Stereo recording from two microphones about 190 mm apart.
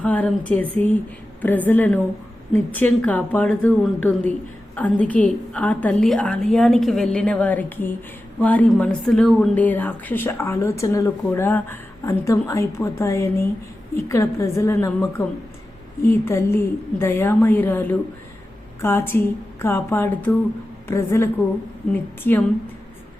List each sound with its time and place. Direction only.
0.0 s a woman's voice: 5° left (ahead or behind)
16.0 s a woman's voice: 15° left (ahead or behind)